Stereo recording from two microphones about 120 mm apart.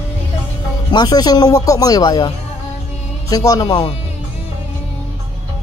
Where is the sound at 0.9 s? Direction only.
35° left (ahead or behind).